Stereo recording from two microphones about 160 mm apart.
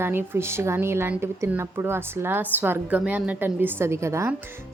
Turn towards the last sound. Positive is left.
turn(degrees=-15)  # may be behind; listen again after turning